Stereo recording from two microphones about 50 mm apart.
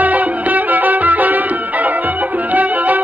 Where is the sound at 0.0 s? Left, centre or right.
Right.